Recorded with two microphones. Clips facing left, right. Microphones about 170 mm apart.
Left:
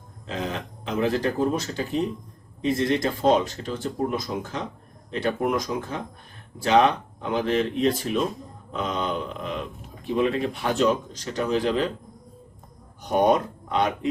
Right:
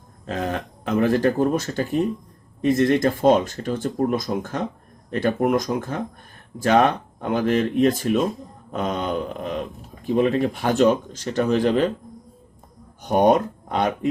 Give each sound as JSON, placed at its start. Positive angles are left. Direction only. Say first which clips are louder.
{"t": 0.3, "sound": "speech", "louder": "right 4 dB", "side_deg": -50}
{"t": 13.1, "sound": "speech", "louder": "right 3 dB", "side_deg": -45}